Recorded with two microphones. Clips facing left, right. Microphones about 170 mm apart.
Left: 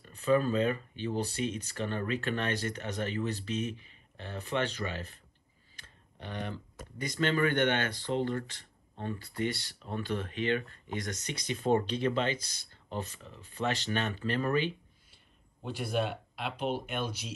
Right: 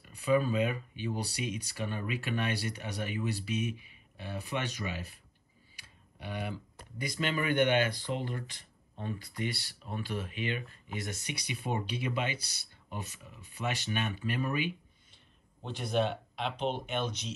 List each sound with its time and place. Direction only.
0.0 s speech: 10° right (ahead or behind)
15.6 s speech: 5° left (ahead or behind)